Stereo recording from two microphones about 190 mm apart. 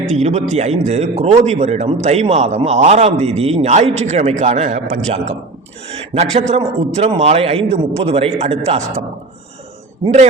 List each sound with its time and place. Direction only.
0.1 s a man's voice: 35° right (ahead or behind)
6.5 s a man's voice: 35° right (ahead or behind)